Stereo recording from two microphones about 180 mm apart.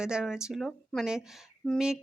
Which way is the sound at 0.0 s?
5° right (ahead or behind).